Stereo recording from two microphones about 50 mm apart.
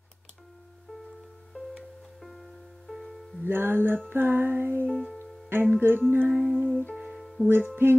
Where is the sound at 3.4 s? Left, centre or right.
Right.